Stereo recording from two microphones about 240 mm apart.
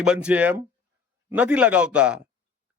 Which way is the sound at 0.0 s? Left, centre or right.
Centre.